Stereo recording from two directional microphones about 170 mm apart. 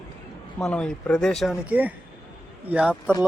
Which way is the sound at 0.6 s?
5° left (ahead or behind).